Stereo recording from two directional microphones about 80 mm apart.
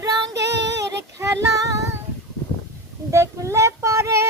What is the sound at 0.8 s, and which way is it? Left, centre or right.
Child singing, right.